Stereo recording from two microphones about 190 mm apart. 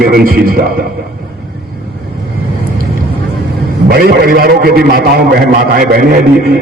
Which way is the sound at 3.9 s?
55° right (ahead or behind).